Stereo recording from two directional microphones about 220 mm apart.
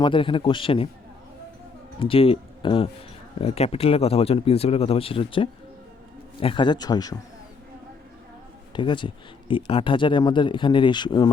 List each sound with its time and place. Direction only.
0.0 s speech: 25° left (ahead or behind)
2.0 s speech: 25° left (ahead or behind)
8.7 s speech: 20° left (ahead or behind)